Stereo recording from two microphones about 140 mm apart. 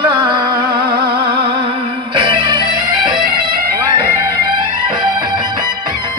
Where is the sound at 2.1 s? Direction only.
35° right (ahead or behind).